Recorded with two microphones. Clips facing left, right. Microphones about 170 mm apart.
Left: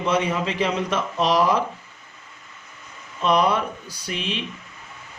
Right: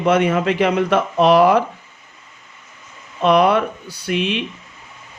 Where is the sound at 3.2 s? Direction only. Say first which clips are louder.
Right 6 dB; 65° right (ahead or behind).